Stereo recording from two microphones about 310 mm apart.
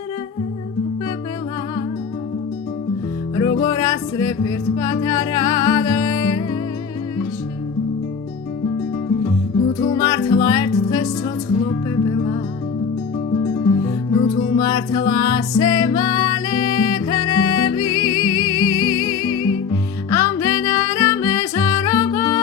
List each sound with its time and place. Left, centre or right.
3.6 s music: centre
10.0 s music: centre
13.8 s music: centre